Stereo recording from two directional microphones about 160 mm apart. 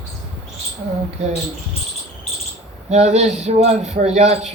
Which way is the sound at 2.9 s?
45° right (ahead or behind).